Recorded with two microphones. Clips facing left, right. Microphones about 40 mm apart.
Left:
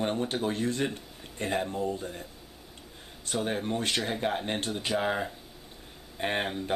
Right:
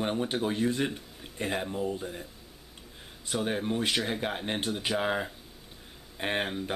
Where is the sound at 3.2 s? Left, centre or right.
Centre.